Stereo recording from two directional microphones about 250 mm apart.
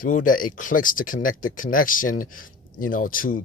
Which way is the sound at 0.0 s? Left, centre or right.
Left.